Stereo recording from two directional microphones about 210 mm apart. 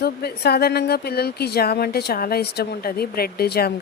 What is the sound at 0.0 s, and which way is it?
Speech, 50° left (ahead or behind).